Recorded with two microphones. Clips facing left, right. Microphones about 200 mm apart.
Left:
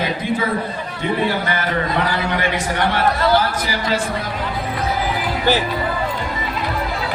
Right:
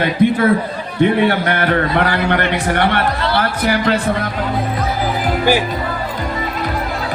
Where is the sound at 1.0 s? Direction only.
65° right (ahead or behind).